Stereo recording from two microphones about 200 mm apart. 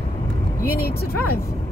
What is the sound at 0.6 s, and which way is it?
Speech, 50° left (ahead or behind).